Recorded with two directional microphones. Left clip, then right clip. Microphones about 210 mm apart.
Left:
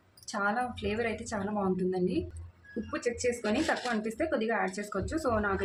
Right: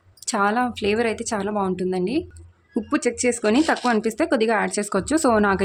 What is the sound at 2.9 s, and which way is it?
Speech, 55° right (ahead or behind).